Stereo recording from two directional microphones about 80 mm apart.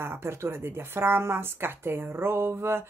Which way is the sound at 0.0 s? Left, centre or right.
Right.